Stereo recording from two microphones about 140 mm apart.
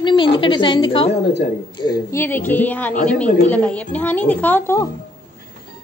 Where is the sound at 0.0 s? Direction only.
35° left (ahead or behind).